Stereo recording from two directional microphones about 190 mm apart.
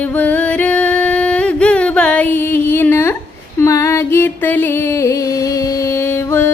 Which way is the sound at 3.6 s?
15° left (ahead or behind).